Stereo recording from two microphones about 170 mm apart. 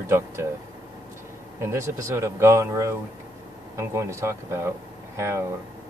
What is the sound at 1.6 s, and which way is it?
Speech, 15° right (ahead or behind).